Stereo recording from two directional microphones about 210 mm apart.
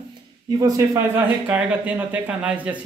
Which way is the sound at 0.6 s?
15° right (ahead or behind).